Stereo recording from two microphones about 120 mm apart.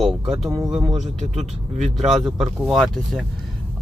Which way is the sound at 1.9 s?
5° right (ahead or behind).